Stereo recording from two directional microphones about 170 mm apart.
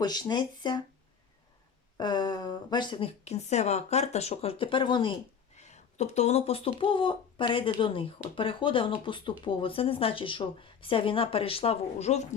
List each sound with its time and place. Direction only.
0.0 s speech: 25° left (ahead or behind)
2.0 s speech: 25° left (ahead or behind)
5.5 s speech: 40° left (ahead or behind)